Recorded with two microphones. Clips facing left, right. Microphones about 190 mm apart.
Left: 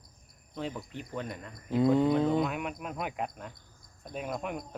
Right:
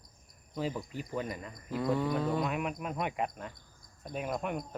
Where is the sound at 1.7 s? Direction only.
25° left (ahead or behind).